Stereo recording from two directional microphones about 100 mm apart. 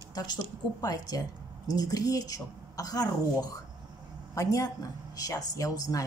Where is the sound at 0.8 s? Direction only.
40° left (ahead or behind).